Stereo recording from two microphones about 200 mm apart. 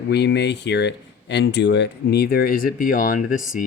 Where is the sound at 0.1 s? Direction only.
60° left (ahead or behind).